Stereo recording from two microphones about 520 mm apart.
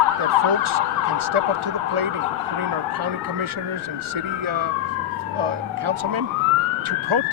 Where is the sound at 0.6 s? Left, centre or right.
Right.